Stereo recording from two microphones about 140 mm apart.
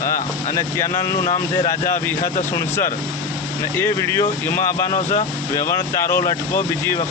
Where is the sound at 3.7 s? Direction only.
15° left (ahead or behind).